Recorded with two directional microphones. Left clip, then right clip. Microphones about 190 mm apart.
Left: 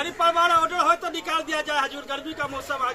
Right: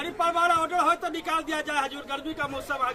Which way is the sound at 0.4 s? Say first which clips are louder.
Left 3 dB; 25° right (ahead or behind).